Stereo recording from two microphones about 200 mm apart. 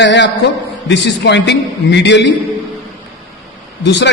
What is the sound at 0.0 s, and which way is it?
A man's voice, 60° left (ahead or behind).